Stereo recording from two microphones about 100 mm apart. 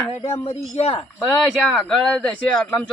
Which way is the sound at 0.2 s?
55° left (ahead or behind).